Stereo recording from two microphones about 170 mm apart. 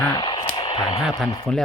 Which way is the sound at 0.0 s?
20° left (ahead or behind).